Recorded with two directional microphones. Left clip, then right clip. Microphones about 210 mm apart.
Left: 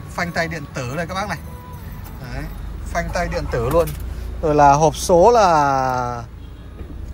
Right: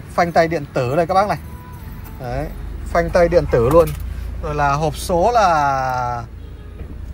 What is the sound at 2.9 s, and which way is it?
Speech, 5° right (ahead or behind).